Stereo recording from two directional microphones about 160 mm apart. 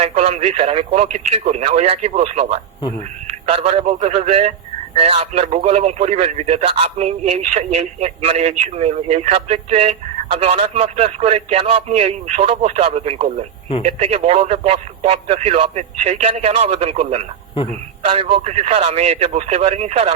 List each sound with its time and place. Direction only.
0.0 s a man's voice: 40° right (ahead or behind)